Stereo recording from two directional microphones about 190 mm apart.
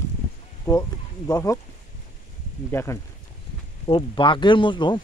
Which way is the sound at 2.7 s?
15° left (ahead or behind).